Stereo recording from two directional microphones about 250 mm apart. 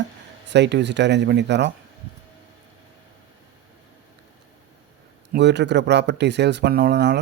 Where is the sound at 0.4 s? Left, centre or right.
Right.